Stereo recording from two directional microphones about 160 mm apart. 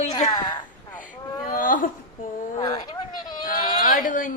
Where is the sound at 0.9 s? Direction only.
55° left (ahead or behind).